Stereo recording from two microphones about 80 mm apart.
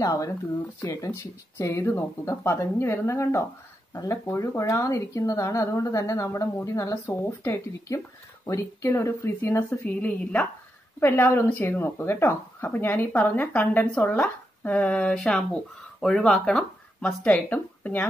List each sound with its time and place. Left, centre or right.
0.0 s a woman's voice: left
1.8 s a woman's voice: left
3.9 s speech: left
4.3 s a woman's voice: left
7.1 s a woman's voice: left
9.8 s speech: centre